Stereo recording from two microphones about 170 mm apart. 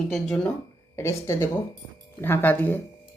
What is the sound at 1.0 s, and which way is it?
Speech, 15° left (ahead or behind).